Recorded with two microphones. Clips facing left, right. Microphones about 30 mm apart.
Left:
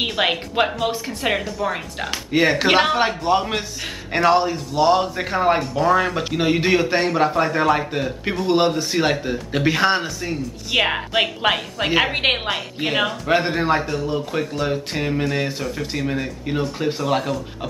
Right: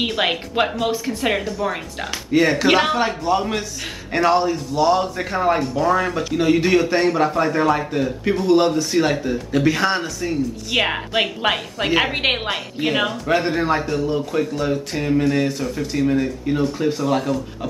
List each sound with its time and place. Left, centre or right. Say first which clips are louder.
0.0 s speech: even; centre
2.3 s a man's voice: right 1 dB; centre